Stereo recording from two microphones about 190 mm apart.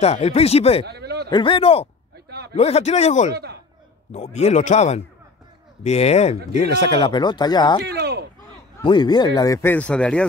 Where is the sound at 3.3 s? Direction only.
60° right (ahead or behind).